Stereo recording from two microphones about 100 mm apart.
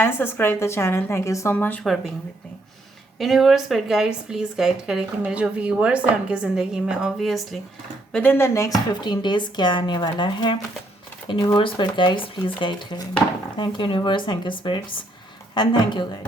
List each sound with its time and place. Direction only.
0.0 s a woman's voice: 25° left (ahead or behind)
1.5 s a woman's voice: 20° left (ahead or behind)
3.2 s speech: centre (ahead or behind)
8.1 s a woman's voice: 20° left (ahead or behind)
9.0 s speech: 50° left (ahead or behind)